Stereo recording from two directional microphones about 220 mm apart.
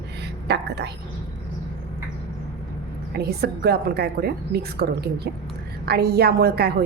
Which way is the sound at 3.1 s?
45° right (ahead or behind).